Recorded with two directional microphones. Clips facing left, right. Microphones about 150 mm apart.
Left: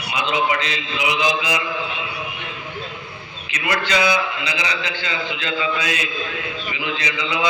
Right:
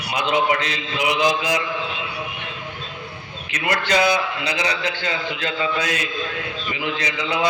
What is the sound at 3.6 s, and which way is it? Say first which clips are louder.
A man's voice: right 1 dB; 45° right (ahead or behind).